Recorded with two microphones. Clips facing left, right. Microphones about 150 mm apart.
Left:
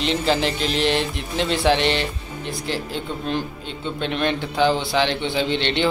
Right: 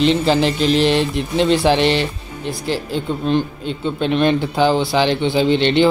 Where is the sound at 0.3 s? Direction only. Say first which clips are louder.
Right 6 dB; 35° right (ahead or behind).